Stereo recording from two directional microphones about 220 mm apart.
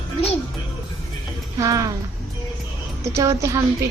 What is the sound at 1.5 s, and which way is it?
Speech, 15° right (ahead or behind).